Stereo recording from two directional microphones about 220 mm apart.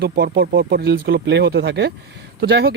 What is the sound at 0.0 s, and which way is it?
Speech, 45° right (ahead or behind).